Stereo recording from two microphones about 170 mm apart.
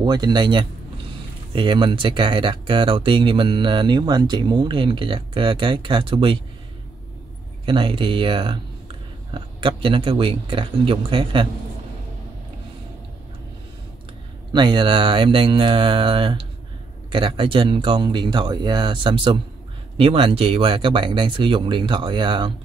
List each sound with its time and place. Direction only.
0.0 s speech: 25° right (ahead or behind)
7.6 s speech: 30° right (ahead or behind)
14.5 s speech: 25° right (ahead or behind)